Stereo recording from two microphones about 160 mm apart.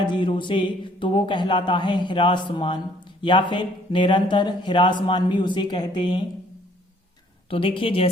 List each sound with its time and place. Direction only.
0.0 s speech: 30° left (ahead or behind)
7.5 s speech: 35° left (ahead or behind)